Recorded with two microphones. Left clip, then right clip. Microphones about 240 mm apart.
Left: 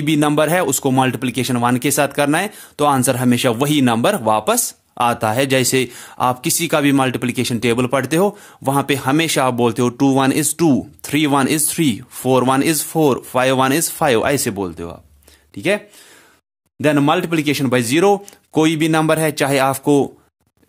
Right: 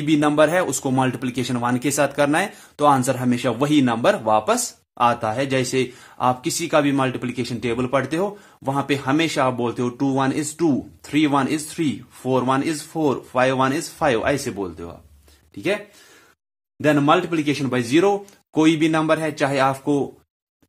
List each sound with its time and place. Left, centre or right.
0.0 s speech: left
16.8 s speech: left